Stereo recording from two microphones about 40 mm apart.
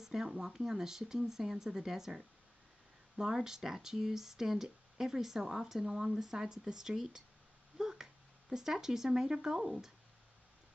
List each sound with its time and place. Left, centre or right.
0.0 s speech: centre